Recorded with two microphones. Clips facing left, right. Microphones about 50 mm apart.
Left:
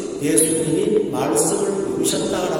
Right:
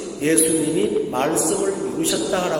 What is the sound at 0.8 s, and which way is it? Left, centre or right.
Speech, right.